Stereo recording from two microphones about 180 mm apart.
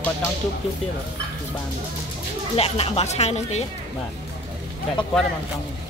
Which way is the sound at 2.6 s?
35° left (ahead or behind).